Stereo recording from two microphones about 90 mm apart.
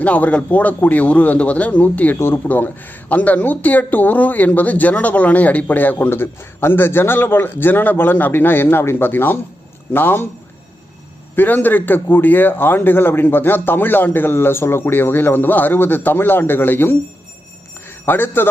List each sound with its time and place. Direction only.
0.0 s a man's voice: 15° left (ahead or behind)
11.3 s a man's voice: 20° left (ahead or behind)
17.8 s a sound: 20° left (ahead or behind)